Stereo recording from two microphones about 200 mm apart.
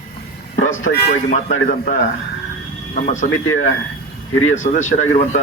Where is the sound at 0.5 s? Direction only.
40° left (ahead or behind).